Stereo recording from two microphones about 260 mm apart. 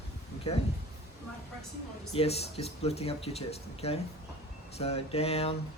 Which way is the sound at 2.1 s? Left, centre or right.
Left.